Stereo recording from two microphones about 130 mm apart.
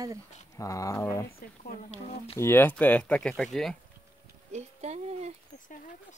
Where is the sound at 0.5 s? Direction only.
25° left (ahead or behind).